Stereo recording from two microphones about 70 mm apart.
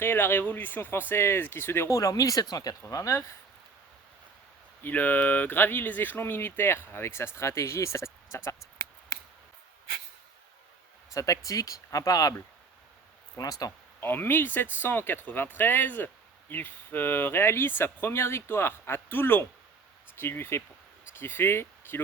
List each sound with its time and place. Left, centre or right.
0.0 s speech: left
1.9 s speech: left
2.9 s speech: left
4.8 s speech: left
8.4 s a sound: left
11.1 s speech: left
13.3 s speech: left
14.0 s speech: left